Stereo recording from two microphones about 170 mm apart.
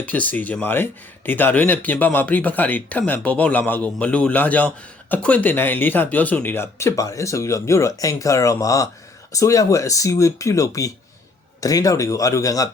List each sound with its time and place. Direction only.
0.0 s speech: 10° left (ahead or behind)